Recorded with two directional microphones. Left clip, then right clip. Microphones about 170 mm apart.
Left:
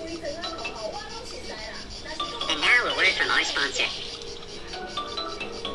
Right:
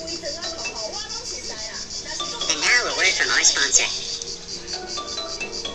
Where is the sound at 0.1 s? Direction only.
15° left (ahead or behind).